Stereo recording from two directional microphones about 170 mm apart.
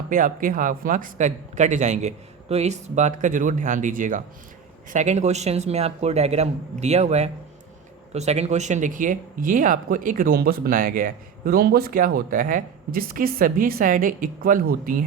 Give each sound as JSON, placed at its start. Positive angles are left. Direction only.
{"t": 0.1, "sound": "a man's voice", "side_deg": -50}